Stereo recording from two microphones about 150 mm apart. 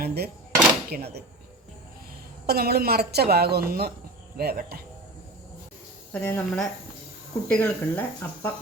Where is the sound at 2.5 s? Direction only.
90° right.